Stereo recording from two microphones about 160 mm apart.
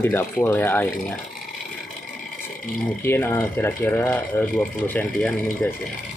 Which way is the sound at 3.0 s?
15° left (ahead or behind).